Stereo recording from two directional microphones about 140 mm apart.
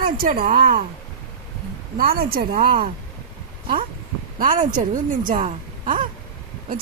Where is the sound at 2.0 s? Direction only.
90° right.